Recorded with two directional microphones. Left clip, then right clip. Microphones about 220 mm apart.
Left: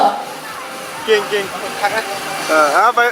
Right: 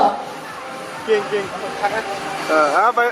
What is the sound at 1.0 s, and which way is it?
Speech, 10° right (ahead or behind).